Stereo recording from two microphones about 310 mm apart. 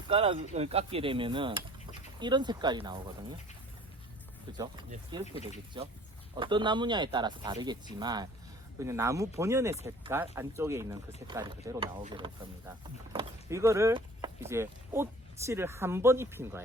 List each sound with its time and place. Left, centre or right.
0.1 s speech: centre
4.5 s speech: centre